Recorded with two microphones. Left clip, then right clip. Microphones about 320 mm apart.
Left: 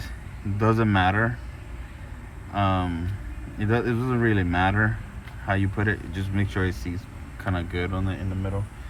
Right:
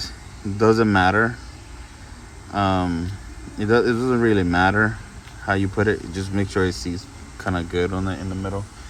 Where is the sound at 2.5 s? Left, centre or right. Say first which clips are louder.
Right 4 dB; right.